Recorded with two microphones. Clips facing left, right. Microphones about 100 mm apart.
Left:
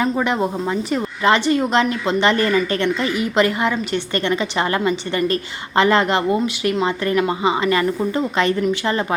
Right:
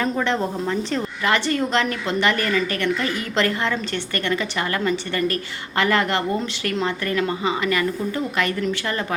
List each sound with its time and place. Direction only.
0.0 s a woman's voice: 15° left (ahead or behind)